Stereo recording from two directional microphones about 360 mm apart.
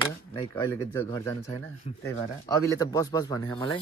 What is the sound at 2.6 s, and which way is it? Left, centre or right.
Speech, centre.